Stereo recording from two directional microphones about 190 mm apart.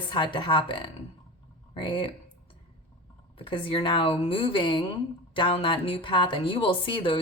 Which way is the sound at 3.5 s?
25° left (ahead or behind).